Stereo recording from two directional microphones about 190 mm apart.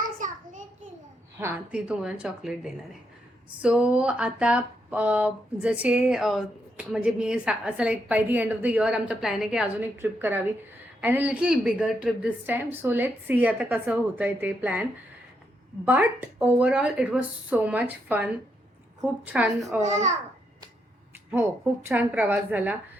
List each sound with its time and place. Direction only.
1.4 s a woman's voice: 10° right (ahead or behind)
15.9 s a woman's voice: 10° right (ahead or behind)
19.8 s a child's voice: 35° right (ahead or behind)
21.2 s a woman's voice: 10° right (ahead or behind)